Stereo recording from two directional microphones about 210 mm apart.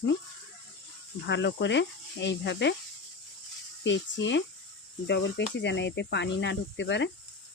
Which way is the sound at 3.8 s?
60° left (ahead or behind).